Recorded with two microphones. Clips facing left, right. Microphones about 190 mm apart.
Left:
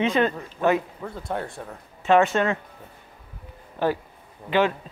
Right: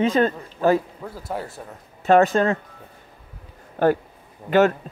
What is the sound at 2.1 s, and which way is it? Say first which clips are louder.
Speech: right 3 dB; 35° right (ahead or behind).